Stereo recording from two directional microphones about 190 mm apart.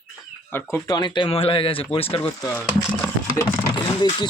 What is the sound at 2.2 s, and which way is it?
Speech, 10° left (ahead or behind).